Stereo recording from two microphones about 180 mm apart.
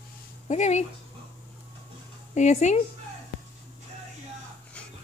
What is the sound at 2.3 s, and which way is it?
Speech, 40° left (ahead or behind).